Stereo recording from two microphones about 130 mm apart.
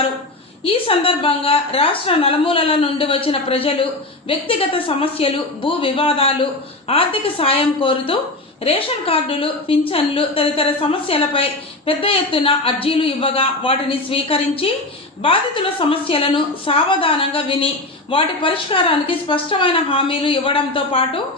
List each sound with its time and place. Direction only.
0.6 s speech: 45° left (ahead or behind)